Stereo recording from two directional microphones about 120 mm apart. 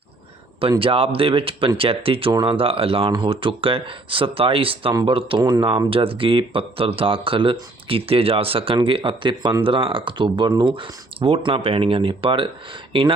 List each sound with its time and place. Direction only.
0.8 s speech: 50° right (ahead or behind)
5.4 s speech: 35° right (ahead or behind)